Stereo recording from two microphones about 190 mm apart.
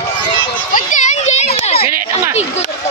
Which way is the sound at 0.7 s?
40° left (ahead or behind).